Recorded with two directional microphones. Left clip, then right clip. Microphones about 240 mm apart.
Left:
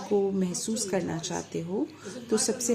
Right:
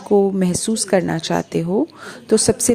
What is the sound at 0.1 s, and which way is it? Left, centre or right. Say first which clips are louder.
A woman's voice: right 11 dB; right.